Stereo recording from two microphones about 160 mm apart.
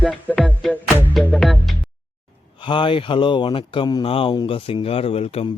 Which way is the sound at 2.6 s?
30° left (ahead or behind).